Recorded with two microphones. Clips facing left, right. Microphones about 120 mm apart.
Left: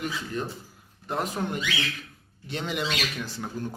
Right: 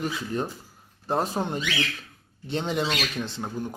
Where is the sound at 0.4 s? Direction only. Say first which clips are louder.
Right 2 dB; 35° right (ahead or behind).